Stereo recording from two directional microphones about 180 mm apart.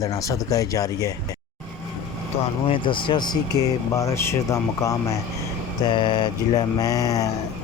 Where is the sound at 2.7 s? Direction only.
30° left (ahead or behind).